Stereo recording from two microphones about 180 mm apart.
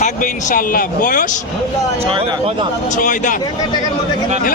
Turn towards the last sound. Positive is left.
turn(degrees=45)  # may be behind; listen again after turning